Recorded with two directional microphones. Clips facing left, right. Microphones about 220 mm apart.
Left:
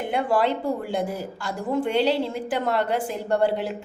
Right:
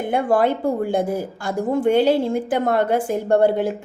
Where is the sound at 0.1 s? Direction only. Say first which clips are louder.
Right 4 dB; 50° right (ahead or behind).